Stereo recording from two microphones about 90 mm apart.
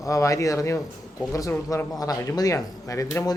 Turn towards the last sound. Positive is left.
turn(degrees=35)  # may be behind; listen again after turning